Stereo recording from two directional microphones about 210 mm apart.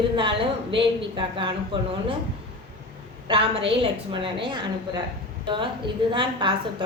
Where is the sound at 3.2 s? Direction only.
25° right (ahead or behind).